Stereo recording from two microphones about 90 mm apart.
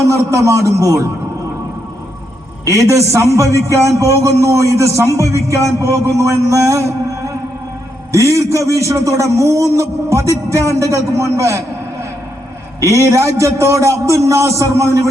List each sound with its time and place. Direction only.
0.2 s a man's voice: 35° right (ahead or behind)
2.6 s a man's voice: 35° right (ahead or behind)
12.8 s a man's voice: 35° right (ahead or behind)